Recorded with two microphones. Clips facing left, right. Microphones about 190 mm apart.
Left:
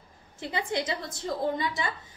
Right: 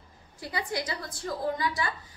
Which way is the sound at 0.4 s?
25° left (ahead or behind).